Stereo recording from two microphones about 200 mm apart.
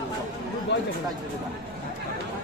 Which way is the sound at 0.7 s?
60° left (ahead or behind).